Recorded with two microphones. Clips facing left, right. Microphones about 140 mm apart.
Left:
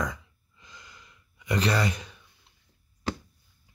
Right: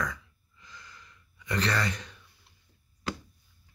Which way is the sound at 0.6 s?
15° left (ahead or behind).